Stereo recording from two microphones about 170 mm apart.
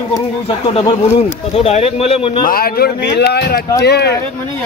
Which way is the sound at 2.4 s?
60° left (ahead or behind).